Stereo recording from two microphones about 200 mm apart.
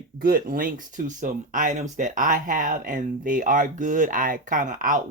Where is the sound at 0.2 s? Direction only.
45° right (ahead or behind).